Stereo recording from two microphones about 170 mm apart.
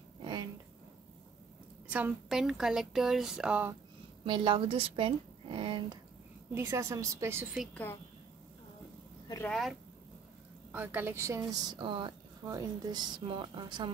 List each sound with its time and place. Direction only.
0.2 s a sound: 25° right (ahead or behind)
1.9 s speech: 10° right (ahead or behind)
4.2 s a woman's voice: 30° right (ahead or behind)
6.5 s speech: 15° right (ahead or behind)
7.7 s a woman's voice: 10° left (ahead or behind)
9.5 s a woman's voice: centre (ahead or behind); by 13.9 s 25° right (ahead or behind)